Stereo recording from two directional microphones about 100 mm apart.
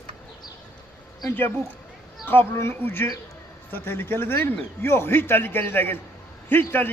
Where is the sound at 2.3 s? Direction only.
25° left (ahead or behind).